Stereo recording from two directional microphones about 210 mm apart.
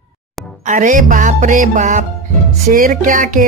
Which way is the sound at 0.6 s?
35° right (ahead or behind).